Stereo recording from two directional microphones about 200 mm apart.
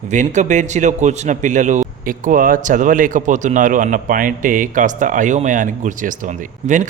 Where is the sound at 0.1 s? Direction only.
35° right (ahead or behind).